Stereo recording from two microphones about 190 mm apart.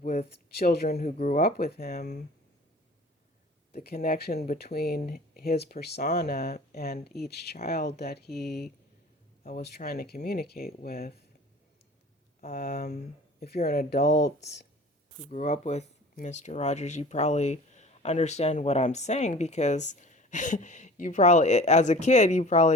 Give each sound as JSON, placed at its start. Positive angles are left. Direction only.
{"t": 0.5, "sound": "speech", "side_deg": 55}
{"t": 0.9, "sound": "speech", "side_deg": 35}
{"t": 1.4, "sound": "speech", "side_deg": 55}
{"t": 3.8, "sound": "speech", "side_deg": 50}
{"t": 12.4, "sound": "speech", "side_deg": 50}
{"t": 15.3, "sound": "speech", "side_deg": 35}